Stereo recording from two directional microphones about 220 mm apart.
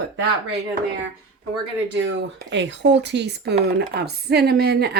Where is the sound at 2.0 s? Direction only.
55° right (ahead or behind).